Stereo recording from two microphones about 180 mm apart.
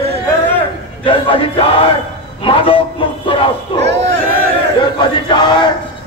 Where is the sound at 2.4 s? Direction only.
30° left (ahead or behind).